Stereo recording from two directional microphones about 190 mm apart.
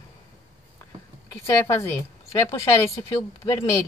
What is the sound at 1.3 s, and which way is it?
Speech, 15° left (ahead or behind).